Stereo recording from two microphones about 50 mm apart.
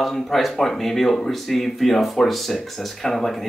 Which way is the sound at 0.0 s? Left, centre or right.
Centre.